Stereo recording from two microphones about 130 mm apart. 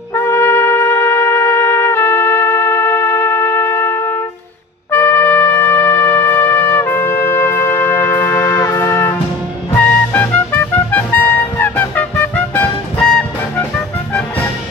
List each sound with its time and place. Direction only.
0.1 s trumpet: 20° left (ahead or behind)
8.5 s music: 20° left (ahead or behind)